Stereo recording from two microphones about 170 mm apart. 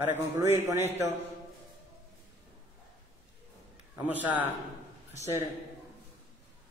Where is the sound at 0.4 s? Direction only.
15° right (ahead or behind).